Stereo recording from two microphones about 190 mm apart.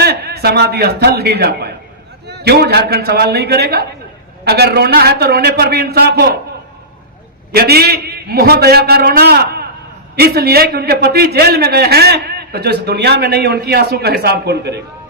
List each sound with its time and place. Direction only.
0.0 s a man's voice: 60° right (ahead or behind)
7.5 s a man's voice: 55° right (ahead or behind)